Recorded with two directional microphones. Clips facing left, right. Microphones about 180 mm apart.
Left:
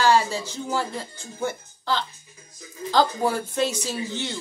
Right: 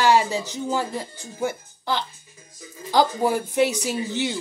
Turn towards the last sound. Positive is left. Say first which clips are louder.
# right 4 dB
turn(degrees=-15)  # may be behind; listen again after turning